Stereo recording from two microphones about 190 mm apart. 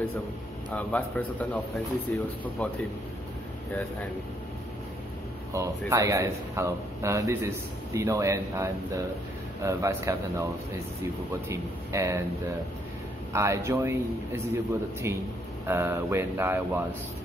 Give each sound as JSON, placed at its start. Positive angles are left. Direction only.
{"t": 0.7, "sound": "a man's voice", "side_deg": 10}
{"t": 2.6, "sound": "a man's voice", "side_deg": 5}
{"t": 5.5, "sound": "speech", "side_deg": -15}
{"t": 13.3, "sound": "speech", "side_deg": -15}